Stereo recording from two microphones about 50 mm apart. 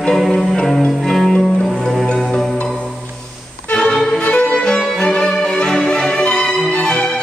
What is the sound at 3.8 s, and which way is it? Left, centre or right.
Music, centre.